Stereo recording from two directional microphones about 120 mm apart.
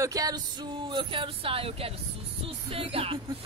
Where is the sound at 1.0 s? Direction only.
45° right (ahead or behind).